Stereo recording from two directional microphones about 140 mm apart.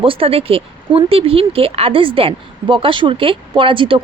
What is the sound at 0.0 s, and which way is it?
Speech, 40° right (ahead or behind).